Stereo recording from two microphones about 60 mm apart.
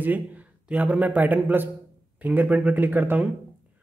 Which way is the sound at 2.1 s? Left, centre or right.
Right.